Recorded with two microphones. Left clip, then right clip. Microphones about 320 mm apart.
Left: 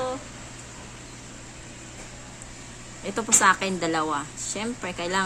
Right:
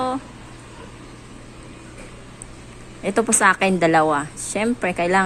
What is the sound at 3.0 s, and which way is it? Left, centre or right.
A woman's voice, centre.